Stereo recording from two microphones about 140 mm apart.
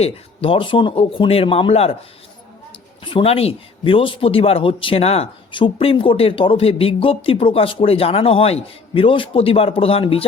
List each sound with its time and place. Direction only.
0.0 s speech: 40° left (ahead or behind)
3.0 s speech: 35° left (ahead or behind)